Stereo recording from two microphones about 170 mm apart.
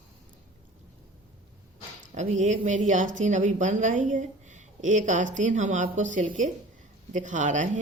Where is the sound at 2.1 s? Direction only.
45° right (ahead or behind).